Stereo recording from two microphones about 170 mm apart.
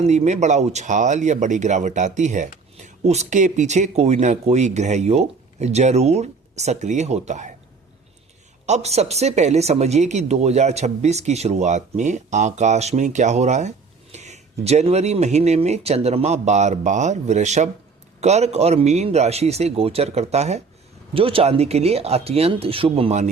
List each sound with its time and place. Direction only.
0.0 s speech: 40° right (ahead or behind)
8.6 s speech: 40° right (ahead or behind)